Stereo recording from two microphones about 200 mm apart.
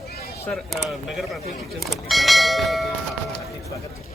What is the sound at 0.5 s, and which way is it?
Speech, centre (ahead or behind).